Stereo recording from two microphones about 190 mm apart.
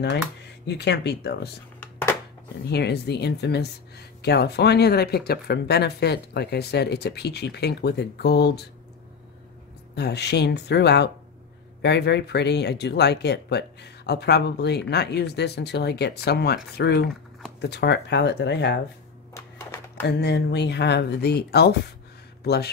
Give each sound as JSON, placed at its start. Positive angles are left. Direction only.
{"t": 0.7, "sound": "speech", "side_deg": 60}
{"t": 2.7, "sound": "speech", "side_deg": 60}
{"t": 9.9, "sound": "speech", "side_deg": 60}
{"t": 19.3, "sound": "typewriter", "side_deg": 15}
{"t": 20.0, "sound": "speech", "side_deg": 60}